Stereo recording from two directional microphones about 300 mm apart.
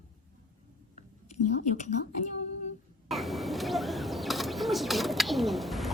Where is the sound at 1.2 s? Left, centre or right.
Left.